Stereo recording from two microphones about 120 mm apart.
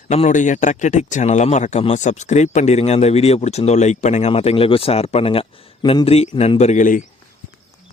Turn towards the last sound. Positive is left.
turn(degrees=90)